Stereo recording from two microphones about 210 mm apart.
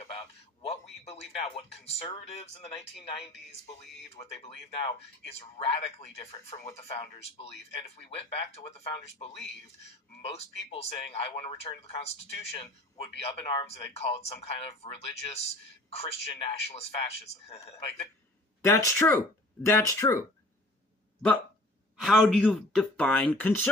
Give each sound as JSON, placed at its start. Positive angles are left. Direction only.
{"t": 0.6, "sound": "a man's voice", "side_deg": 30}
{"t": 4.1, "sound": "speech", "side_deg": 30}
{"t": 16.0, "sound": "speech", "side_deg": 30}
{"t": 18.6, "sound": "speech", "side_deg": 15}
{"t": 21.9, "sound": "speech", "side_deg": 0}